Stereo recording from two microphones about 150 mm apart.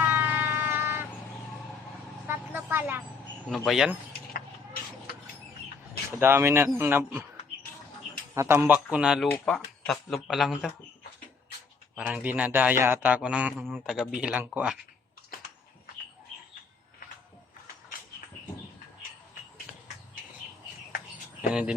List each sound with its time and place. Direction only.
0.0 s vehicle: 15° right (ahead or behind)
2.2 s vehicle: 15° right (ahead or behind)
3.5 s speech: centre (ahead or behind)
6.1 s a man's voice: 15° right (ahead or behind)
8.5 s speech: 10° right (ahead or behind)
11.9 s a man's voice: 10° right (ahead or behind)